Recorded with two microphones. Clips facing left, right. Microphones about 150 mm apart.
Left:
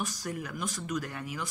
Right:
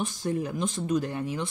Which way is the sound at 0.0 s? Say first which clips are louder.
Right 7 dB; 25° right (ahead or behind).